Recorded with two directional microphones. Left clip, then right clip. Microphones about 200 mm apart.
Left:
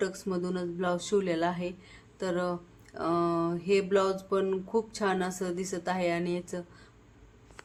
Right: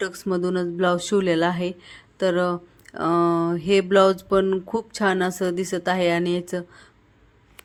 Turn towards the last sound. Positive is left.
turn(degrees=-35)  # may be behind; listen again after turning